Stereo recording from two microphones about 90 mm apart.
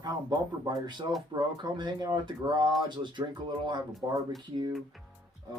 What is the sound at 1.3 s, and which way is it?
Speech, 55° right (ahead or behind).